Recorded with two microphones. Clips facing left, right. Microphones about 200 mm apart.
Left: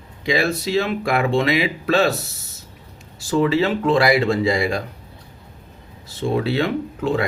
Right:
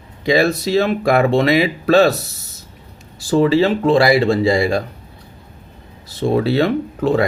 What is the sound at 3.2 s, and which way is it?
Speech, 35° right (ahead or behind).